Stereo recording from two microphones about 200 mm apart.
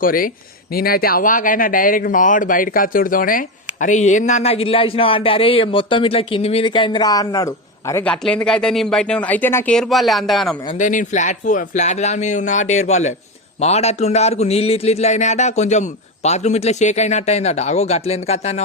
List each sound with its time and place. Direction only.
0.0 s speech: 45° left (ahead or behind); by 8.1 s 15° left (ahead or behind)
8.1 s speech: 5° left (ahead or behind)
10.8 s speech: 40° left (ahead or behind)